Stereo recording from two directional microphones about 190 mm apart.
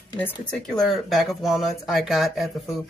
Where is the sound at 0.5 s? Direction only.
Centre (ahead or behind).